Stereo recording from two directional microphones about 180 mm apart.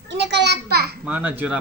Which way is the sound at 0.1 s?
75° right (ahead or behind).